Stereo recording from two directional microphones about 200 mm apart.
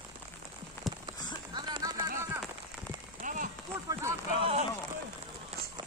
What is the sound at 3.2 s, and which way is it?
Rain on surface, 40° right (ahead or behind).